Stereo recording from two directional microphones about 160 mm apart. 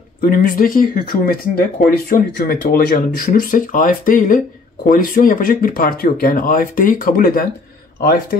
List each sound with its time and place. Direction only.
0.2 s speech: 60° left (ahead or behind)